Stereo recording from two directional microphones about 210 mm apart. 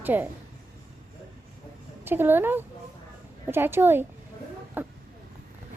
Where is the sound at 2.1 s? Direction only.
10° right (ahead or behind).